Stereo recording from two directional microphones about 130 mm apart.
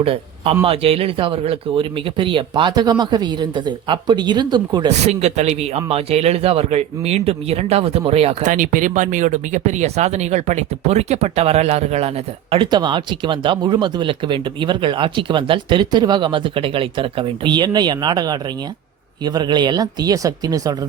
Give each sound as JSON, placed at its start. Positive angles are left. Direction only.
{"t": 0.0, "sound": "speech", "side_deg": -50}
{"t": 4.9, "sound": "a man's voice", "side_deg": -55}
{"t": 8.4, "sound": "speech", "side_deg": -85}
{"t": 12.7, "sound": "speech", "side_deg": -35}